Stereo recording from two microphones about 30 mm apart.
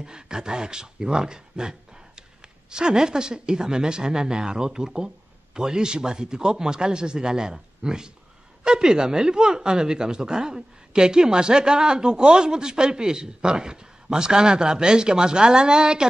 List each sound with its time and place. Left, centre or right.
0.0 s speech: right